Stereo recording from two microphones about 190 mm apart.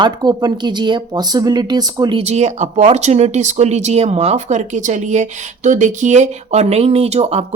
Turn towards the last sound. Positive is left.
turn(degrees=-35)  # may be behind; listen again after turning